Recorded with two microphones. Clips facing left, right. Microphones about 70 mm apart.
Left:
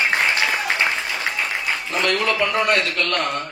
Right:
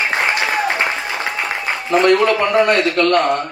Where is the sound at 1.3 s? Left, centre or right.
Right.